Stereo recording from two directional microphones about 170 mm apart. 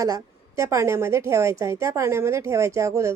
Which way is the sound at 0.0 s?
20° right (ahead or behind).